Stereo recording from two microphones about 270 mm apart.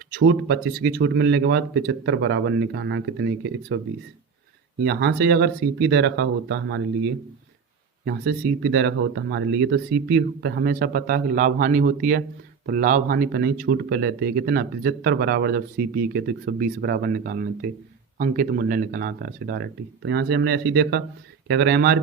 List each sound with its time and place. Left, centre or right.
0.2 s speech: right
4.8 s speech: right
8.0 s speech: right